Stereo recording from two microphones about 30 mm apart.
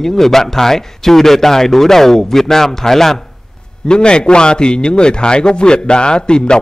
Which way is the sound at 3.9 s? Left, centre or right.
Left.